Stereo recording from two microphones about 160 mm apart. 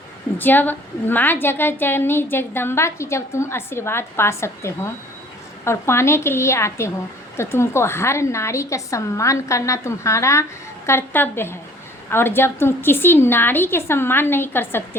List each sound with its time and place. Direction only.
0.3 s a woman's voice: 10° left (ahead or behind)